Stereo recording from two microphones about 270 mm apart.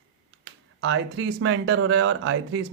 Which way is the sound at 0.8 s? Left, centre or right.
Right.